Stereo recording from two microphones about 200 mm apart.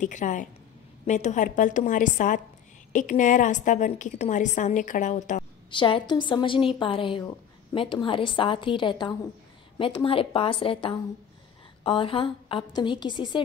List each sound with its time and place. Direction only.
0.0 s a woman's voice: 40° left (ahead or behind)
5.7 s a woman's voice: 25° left (ahead or behind)